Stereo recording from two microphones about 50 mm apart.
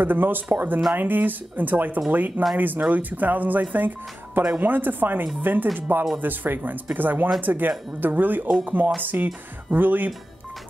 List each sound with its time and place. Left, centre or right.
0.0 s speech: right